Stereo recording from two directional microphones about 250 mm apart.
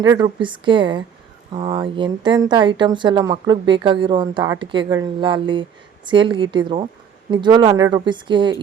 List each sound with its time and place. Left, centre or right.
0.0 s speech: centre